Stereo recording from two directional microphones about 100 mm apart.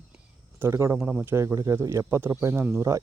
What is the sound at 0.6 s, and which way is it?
Speech, 30° right (ahead or behind).